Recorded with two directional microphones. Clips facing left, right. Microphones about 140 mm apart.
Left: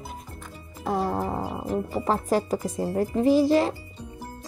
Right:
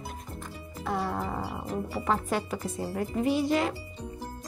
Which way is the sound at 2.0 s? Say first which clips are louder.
Left 5 dB; 35° left (ahead or behind).